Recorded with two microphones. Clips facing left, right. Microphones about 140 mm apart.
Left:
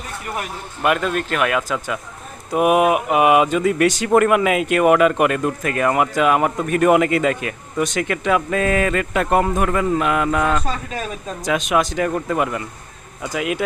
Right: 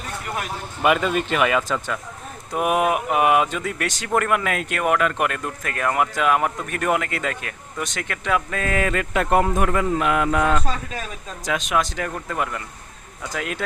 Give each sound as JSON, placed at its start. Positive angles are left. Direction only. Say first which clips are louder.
{"t": 0.8, "sound": "speech", "louder": "even", "side_deg": 0}
{"t": 8.7, "sound": "speech", "louder": "left 3 dB", "side_deg": 30}
{"t": 11.4, "sound": "speech", "louder": "left 4 dB", "side_deg": 15}